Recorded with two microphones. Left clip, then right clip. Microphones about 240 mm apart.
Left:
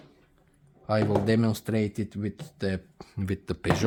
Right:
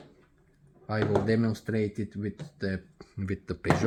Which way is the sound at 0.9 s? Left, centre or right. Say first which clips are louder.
Left 2 dB; left.